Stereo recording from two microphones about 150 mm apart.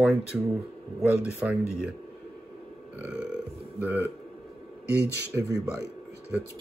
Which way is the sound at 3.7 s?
15° right (ahead or behind).